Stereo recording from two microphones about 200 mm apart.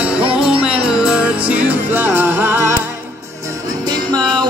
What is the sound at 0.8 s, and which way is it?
Music, 5° right (ahead or behind).